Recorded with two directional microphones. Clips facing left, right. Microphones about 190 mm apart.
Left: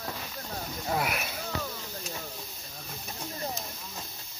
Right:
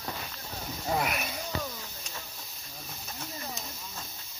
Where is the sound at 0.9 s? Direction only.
5° left (ahead or behind).